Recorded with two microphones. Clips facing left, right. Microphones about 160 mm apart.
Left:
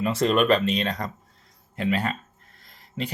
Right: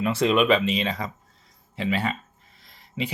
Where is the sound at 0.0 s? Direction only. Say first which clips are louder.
Even; centre (ahead or behind).